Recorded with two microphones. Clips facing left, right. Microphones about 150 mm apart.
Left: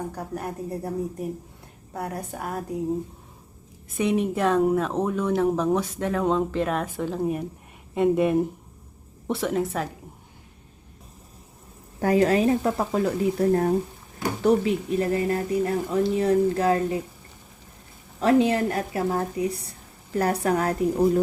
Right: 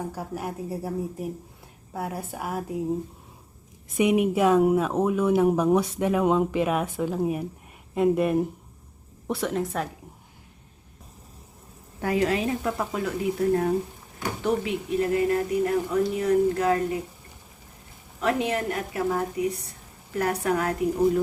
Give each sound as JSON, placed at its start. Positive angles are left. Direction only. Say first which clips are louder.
{"t": 0.0, "sound": "a woman's voice", "louder": "even", "side_deg": -5}
{"t": 3.9, "sound": "a woman's voice", "louder": "right 2 dB", "side_deg": -15}
{"t": 11.9, "sound": "a woman's voice", "louder": "left 4 dB", "side_deg": 40}
{"t": 18.2, "sound": "a woman's voice", "louder": "left 6 dB", "side_deg": 30}